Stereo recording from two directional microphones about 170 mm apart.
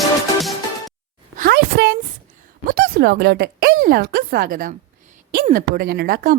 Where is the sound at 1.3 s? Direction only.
65° right (ahead or behind).